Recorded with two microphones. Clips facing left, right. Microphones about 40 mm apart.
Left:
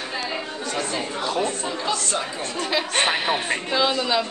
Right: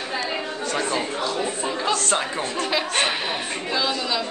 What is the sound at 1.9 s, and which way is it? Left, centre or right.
Speech, right.